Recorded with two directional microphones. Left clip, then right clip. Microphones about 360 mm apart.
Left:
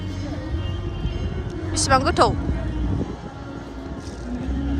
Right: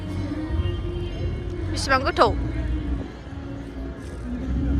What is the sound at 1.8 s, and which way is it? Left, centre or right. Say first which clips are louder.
Speech: left 2 dB; centre.